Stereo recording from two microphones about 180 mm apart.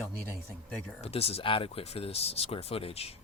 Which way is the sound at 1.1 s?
30° left (ahead or behind).